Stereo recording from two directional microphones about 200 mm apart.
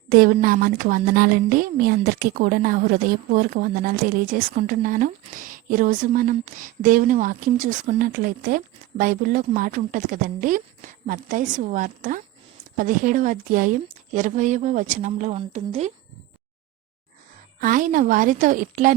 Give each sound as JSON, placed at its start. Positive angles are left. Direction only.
{"t": 0.1, "sound": "a woman's voice", "side_deg": -45}
{"t": 17.6, "sound": "a woman's voice", "side_deg": -40}